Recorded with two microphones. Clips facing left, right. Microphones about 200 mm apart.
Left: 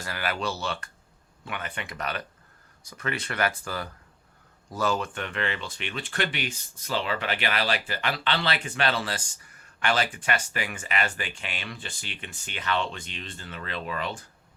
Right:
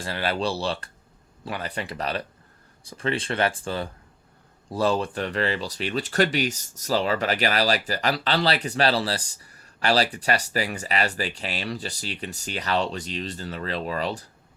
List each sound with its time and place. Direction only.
0.0 s speech: 30° right (ahead or behind)